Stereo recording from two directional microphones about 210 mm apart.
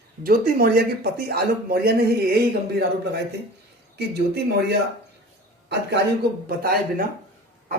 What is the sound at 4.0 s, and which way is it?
Speech, 50° right (ahead or behind).